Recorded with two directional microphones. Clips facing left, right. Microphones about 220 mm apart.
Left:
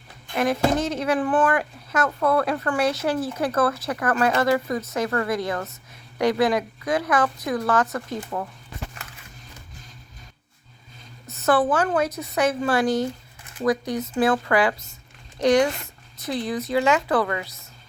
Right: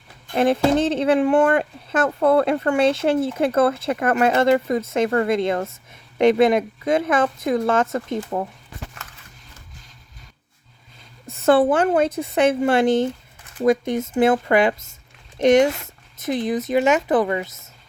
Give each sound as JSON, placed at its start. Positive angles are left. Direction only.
{"t": 0.3, "sound": "speech", "side_deg": -30}
{"t": 11.3, "sound": "speech", "side_deg": -30}